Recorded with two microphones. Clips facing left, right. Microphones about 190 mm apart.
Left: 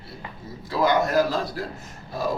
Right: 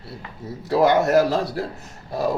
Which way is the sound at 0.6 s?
70° right (ahead or behind).